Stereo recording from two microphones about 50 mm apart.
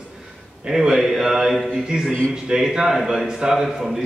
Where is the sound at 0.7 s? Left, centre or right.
Centre.